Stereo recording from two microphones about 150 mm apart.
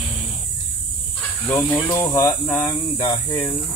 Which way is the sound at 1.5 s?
15° left (ahead or behind).